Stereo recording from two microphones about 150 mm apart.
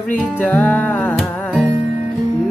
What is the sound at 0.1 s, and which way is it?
Music, 10° left (ahead or behind).